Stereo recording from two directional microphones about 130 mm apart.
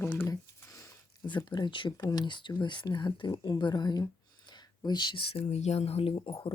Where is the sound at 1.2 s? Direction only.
35° left (ahead or behind).